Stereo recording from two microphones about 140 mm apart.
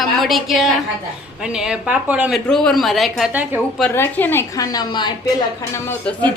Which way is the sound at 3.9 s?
15° left (ahead or behind).